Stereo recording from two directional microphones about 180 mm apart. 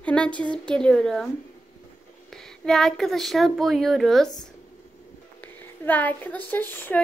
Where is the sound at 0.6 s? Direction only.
5° left (ahead or behind).